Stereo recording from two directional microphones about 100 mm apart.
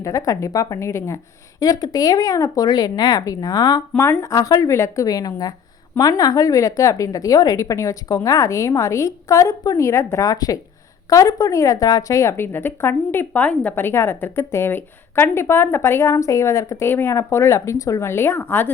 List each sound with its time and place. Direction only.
0.0 s a woman's voice: 30° left (ahead or behind)
10.2 s a woman's voice: 40° left (ahead or behind); by 18.7 s 20° left (ahead or behind)